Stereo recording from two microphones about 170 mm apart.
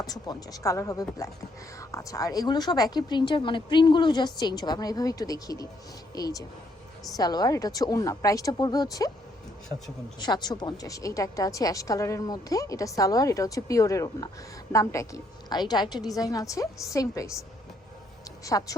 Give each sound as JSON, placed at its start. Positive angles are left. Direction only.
{"t": 0.0, "sound": "a woman's voice", "side_deg": 20}
{"t": 10.2, "sound": "a woman's voice", "side_deg": 25}
{"t": 18.4, "sound": "a woman's voice", "side_deg": 20}